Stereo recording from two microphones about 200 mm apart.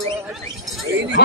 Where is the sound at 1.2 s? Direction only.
55° left (ahead or behind).